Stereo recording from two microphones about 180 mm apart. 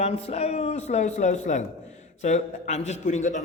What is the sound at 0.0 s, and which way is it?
A man's voice, 35° left (ahead or behind).